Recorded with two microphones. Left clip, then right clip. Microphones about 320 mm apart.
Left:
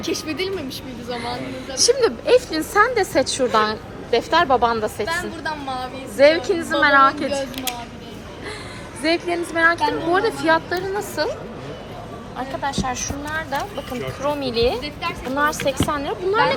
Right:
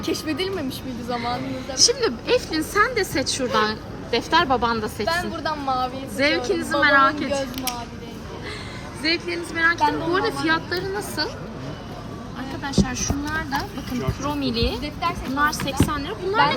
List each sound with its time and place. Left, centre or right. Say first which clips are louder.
0.0 s a woman's voice: left 1 dB; centre
1.2 s speech: right 1 dB; centre
5.0 s a woman's voice: right 1 dB; centre
6.1 s speech: left 7 dB; centre
9.3 s speech: left 5 dB; centre
12.6 s a woman's voice: even; centre